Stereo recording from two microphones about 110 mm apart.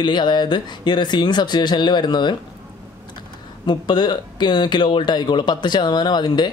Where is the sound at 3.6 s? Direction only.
40° left (ahead or behind).